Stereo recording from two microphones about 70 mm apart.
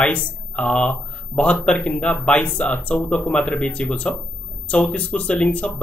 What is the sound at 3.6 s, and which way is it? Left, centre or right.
Speech, centre.